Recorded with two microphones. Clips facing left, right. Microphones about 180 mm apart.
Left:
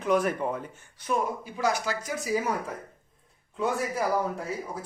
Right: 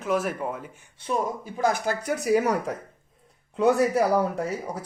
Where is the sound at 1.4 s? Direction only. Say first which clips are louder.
Right 3 dB; 50° right (ahead or behind).